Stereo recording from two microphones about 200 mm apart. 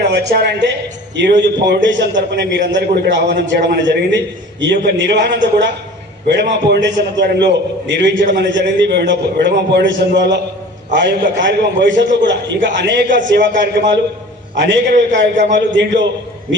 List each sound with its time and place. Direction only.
0.1 s a man's voice: 55° right (ahead or behind)